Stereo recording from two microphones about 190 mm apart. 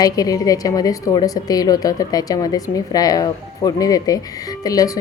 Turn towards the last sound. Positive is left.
turn(degrees=20)  # may be behind; listen again after turning